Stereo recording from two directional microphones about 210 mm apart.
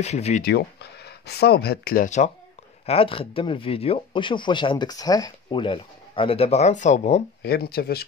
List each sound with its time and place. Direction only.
0.0 s speech: 30° left (ahead or behind)
0.4 s speech: 50° left (ahead or behind); by 7.2 s 30° left (ahead or behind)
7.4 s speech: 50° left (ahead or behind)